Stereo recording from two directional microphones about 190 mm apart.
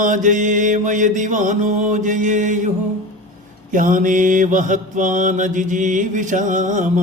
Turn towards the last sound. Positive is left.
turn(degrees=-40)  # may be behind; listen again after turning